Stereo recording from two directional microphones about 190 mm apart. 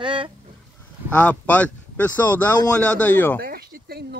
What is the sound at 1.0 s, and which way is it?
A man's voice, 10° left (ahead or behind).